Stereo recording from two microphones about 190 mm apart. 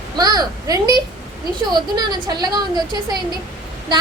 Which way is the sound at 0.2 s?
20° right (ahead or behind).